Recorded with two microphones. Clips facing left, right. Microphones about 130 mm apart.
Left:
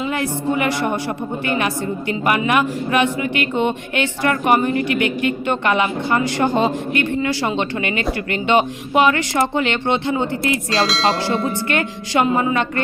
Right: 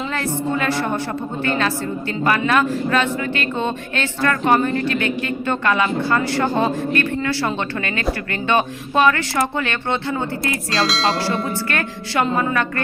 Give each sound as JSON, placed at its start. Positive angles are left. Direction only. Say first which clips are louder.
{"t": 0.0, "sound": "a woman's voice", "louder": "left 2 dB", "side_deg": 15}
{"t": 10.8, "sound": "speech", "louder": "even", "side_deg": 0}
{"t": 11.7, "sound": "speech", "louder": "left 3 dB", "side_deg": 20}